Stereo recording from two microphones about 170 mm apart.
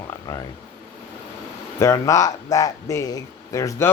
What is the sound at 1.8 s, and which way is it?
Speech, 20° left (ahead or behind).